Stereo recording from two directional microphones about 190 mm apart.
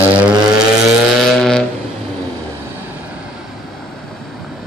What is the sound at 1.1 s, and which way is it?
Vehicle, centre (ahead or behind).